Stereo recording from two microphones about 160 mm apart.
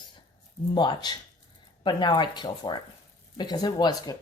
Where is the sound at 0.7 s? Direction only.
30° left (ahead or behind).